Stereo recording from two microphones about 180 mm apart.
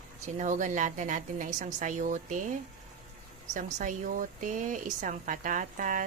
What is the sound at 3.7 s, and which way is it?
Speech, 45° right (ahead or behind).